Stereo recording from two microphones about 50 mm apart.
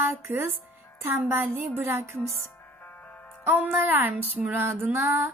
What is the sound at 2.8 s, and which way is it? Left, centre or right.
Music, left.